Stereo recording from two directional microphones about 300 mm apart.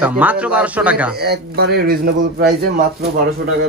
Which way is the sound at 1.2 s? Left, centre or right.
Right.